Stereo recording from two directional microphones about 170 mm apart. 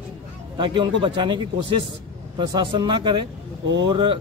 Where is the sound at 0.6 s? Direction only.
30° right (ahead or behind).